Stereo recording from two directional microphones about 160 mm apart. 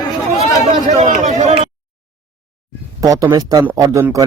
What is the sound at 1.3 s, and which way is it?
Speech, 45° right (ahead or behind).